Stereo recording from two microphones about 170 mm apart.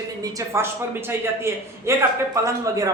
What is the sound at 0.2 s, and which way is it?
A man's voice, 20° right (ahead or behind).